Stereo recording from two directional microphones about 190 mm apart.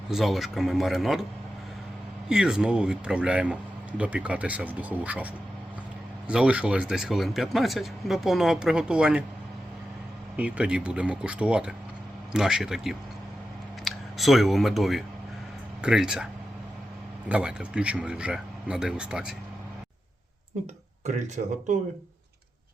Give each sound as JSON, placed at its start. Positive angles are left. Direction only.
{"t": 0.1, "sound": "speech", "side_deg": 0}
{"t": 2.3, "sound": "speech", "side_deg": -5}
{"t": 10.3, "sound": "speech", "side_deg": -5}
{"t": 17.2, "sound": "speech", "side_deg": -5}
{"t": 21.4, "sound": "speech", "side_deg": -45}